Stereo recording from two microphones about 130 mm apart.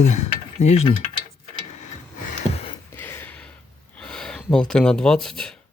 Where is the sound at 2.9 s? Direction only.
20° left (ahead or behind).